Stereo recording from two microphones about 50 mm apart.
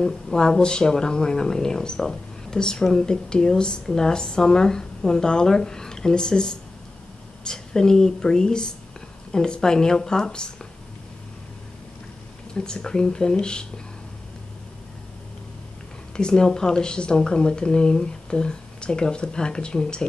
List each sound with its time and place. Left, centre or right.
0.0 s speech: centre
12.5 s speech: centre
16.2 s speech: centre